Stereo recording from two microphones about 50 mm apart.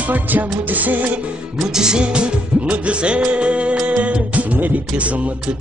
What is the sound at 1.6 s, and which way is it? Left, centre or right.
Music, centre.